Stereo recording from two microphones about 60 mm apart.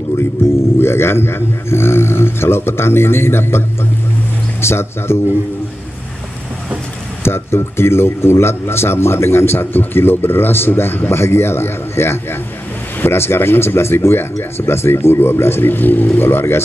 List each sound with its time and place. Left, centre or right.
0.7 s speech: left
7.2 s speech: left